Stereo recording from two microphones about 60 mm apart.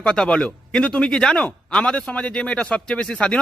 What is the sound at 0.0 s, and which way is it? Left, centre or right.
A man's voice, centre.